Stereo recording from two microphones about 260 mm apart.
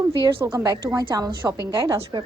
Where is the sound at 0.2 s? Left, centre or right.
Centre.